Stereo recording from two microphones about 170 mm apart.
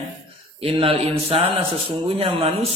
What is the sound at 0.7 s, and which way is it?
A man's voice, 30° right (ahead or behind).